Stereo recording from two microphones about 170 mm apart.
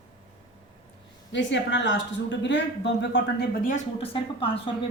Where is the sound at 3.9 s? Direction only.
30° left (ahead or behind).